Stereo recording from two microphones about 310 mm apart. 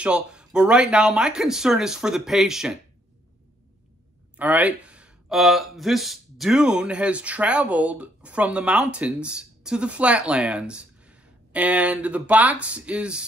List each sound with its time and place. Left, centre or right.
0.0 s speech: centre
4.4 s speech: centre